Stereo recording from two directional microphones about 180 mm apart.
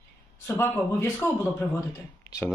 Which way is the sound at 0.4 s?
15° left (ahead or behind).